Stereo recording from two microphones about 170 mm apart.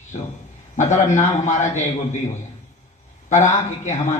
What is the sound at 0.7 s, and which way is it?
A man's voice, 45° left (ahead or behind).